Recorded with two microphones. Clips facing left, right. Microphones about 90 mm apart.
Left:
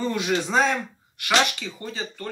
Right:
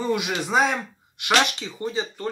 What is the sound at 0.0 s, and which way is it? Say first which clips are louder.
Speech: even; 10° right (ahead or behind).